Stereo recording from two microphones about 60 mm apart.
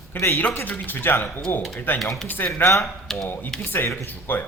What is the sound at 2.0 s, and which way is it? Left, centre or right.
Speech, centre.